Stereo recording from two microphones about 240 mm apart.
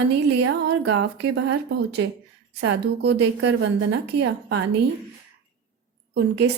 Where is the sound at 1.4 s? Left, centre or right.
Right.